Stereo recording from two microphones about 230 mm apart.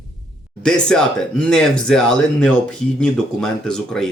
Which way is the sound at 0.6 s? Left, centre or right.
Centre.